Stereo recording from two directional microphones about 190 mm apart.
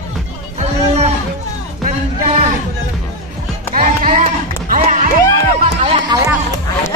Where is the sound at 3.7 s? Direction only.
45° right (ahead or behind).